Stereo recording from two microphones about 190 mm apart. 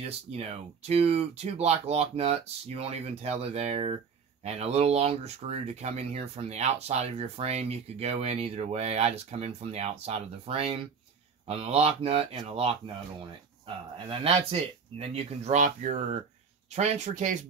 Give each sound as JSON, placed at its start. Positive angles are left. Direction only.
{"t": 0.0, "sound": "speech", "side_deg": -35}